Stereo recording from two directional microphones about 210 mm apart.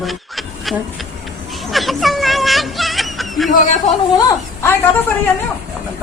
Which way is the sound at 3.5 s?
35° left (ahead or behind).